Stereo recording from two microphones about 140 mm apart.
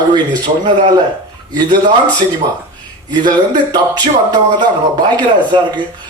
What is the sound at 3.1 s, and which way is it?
Speech, 30° right (ahead or behind).